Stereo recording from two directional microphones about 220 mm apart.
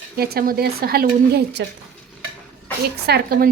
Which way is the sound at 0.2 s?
45° right (ahead or behind).